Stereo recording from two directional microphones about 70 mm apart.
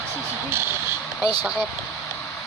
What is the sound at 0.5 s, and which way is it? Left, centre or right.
Speech, right.